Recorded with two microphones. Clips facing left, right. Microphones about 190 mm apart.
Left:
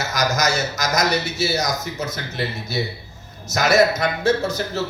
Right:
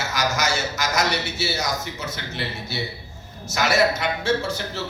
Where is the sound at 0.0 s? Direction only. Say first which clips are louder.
Left 3 dB; 40° left (ahead or behind).